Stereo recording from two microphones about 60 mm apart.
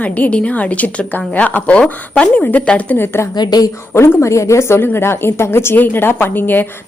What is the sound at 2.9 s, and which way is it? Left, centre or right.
A woman's voice, left.